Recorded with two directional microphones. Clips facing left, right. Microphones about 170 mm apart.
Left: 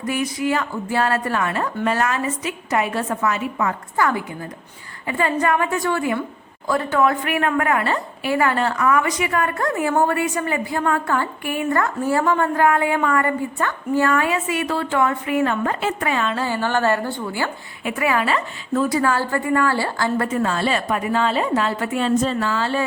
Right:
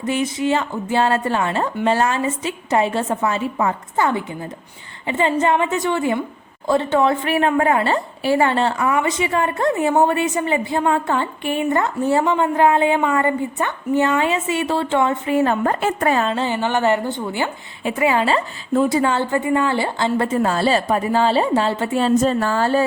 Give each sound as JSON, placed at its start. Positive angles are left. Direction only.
{"t": 0.0, "sound": "a woman's voice", "side_deg": -25}
{"t": 16.3, "sound": "a woman's voice", "side_deg": -20}